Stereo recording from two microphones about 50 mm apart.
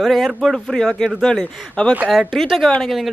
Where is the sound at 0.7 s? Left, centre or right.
Centre.